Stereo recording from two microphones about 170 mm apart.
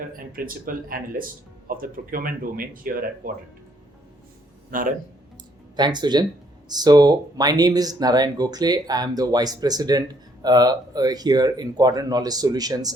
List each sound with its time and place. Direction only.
0.3 s speech: 55° right (ahead or behind)
4.7 s a man's voice: 55° right (ahead or behind)
5.7 s speech: 25° right (ahead or behind)